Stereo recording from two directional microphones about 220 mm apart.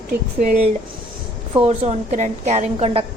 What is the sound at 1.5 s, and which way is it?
A woman's voice, 25° right (ahead or behind).